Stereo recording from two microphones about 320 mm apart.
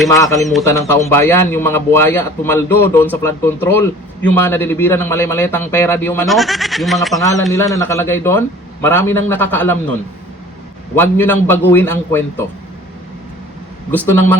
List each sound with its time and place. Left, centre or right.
0.4 s a man's voice: centre
10.9 s a man's voice: centre
13.9 s speech: centre